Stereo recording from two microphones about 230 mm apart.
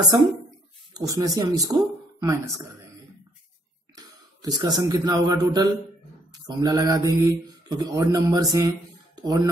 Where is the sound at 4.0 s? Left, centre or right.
Centre.